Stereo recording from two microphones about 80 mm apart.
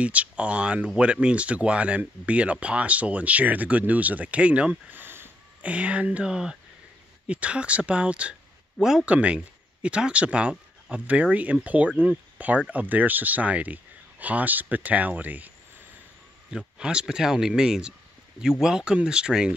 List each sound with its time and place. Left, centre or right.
0.0 s speech: centre
5.6 s speech: centre